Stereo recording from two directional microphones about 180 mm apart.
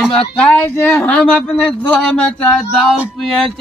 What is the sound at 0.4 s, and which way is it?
A man's voice, 10° left (ahead or behind).